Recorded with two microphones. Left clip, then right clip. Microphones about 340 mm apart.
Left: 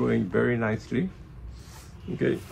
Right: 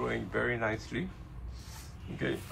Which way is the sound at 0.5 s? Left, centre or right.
Centre.